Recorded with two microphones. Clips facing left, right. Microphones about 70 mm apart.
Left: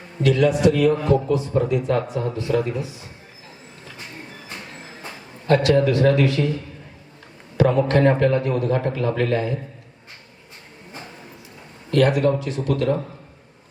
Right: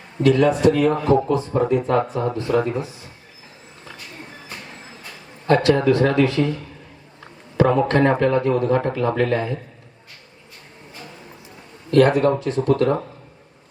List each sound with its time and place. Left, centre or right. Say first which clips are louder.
0.2 s a man's voice: right 2 dB; right
5.5 s a man's voice: right 1 dB; right
7.5 s a man's voice: right 1 dB; right
11.9 s a man's voice: right 3 dB; right